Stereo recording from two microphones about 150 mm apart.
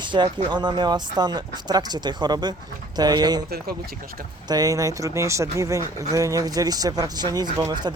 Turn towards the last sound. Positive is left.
turn(degrees=-30)  # may be behind; listen again after turning